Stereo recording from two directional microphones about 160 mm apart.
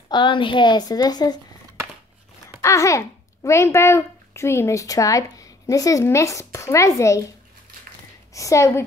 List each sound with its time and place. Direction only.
0.1 s a woman's voice: 30° left (ahead or behind)
2.6 s a child's voice: 20° left (ahead or behind)
8.3 s a woman's voice: 20° left (ahead or behind)